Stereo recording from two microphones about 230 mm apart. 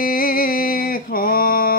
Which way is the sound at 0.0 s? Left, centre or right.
Left.